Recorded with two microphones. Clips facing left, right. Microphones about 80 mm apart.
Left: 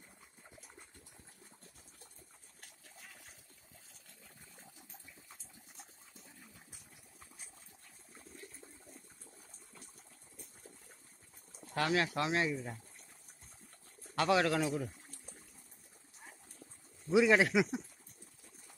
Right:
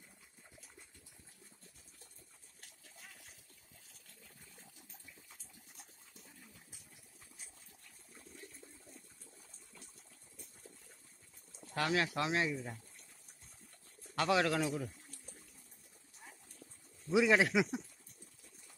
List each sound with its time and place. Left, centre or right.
4.2 s a sound: left
11.7 s speech: centre
14.1 s speech: centre
17.1 s speech: centre